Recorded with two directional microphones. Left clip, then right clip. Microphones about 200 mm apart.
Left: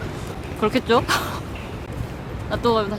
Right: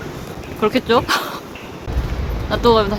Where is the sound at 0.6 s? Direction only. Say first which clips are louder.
Right 3 dB; 10° left (ahead or behind).